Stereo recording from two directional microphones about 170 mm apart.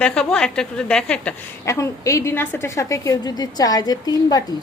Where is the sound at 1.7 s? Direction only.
20° left (ahead or behind).